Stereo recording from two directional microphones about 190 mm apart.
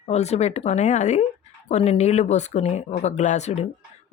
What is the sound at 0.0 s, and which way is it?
Speech, 35° left (ahead or behind).